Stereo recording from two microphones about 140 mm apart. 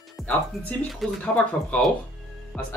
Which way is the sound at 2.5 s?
10° left (ahead or behind).